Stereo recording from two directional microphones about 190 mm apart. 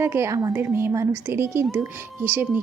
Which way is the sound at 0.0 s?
15° right (ahead or behind).